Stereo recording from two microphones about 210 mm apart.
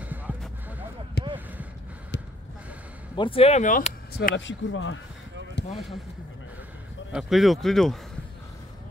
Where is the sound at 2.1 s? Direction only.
55° left (ahead or behind).